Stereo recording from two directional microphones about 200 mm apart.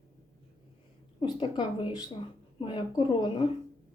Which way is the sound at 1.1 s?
25° left (ahead or behind).